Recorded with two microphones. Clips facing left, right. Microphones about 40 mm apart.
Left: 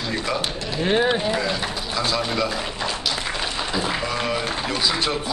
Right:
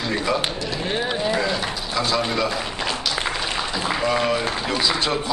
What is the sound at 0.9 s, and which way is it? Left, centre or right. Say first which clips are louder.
Speech: left 6 dB; centre.